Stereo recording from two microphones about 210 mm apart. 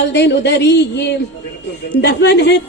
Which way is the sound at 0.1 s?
55° left (ahead or behind).